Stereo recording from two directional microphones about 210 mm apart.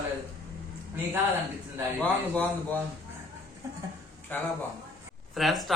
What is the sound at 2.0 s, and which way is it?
Speech, 5° left (ahead or behind).